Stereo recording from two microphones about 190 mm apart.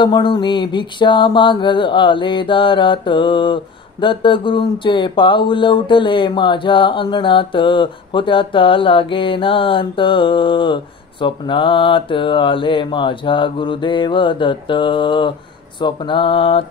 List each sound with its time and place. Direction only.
0.0 s speech: 25° left (ahead or behind)